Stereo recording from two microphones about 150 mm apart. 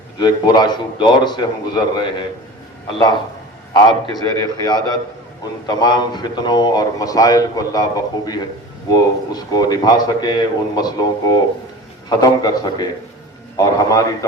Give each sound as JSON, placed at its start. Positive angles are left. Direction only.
{"t": 0.2, "sound": "speech", "side_deg": 25}
{"t": 3.7, "sound": "a man's voice", "side_deg": 25}